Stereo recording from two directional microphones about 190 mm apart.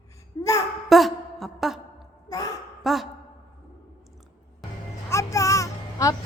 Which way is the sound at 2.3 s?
20° left (ahead or behind).